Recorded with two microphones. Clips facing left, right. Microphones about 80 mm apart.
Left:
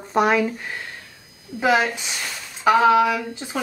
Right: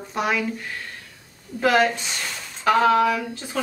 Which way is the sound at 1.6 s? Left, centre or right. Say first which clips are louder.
Even; centre.